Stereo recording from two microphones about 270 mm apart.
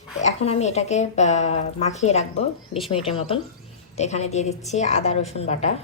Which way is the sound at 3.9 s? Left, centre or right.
Left.